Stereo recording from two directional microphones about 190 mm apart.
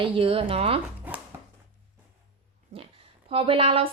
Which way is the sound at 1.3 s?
10° right (ahead or behind).